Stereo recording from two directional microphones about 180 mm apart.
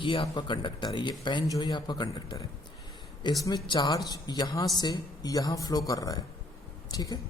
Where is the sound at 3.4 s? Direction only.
25° left (ahead or behind).